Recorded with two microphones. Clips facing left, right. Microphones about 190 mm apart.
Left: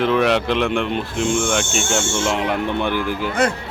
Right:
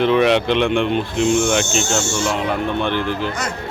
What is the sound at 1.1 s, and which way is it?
Owl, 50° left (ahead or behind).